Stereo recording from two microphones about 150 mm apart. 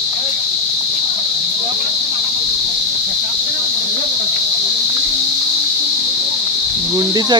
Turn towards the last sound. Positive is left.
turn(degrees=-25)  # may be behind; listen again after turning